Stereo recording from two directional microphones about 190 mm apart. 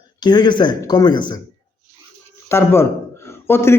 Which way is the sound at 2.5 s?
15° left (ahead or behind).